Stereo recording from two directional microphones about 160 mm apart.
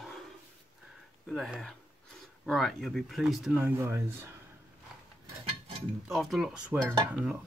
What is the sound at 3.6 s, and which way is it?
Speech, 15° right (ahead or behind).